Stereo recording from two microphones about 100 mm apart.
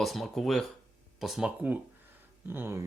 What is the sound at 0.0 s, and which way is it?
Speech, centre (ahead or behind).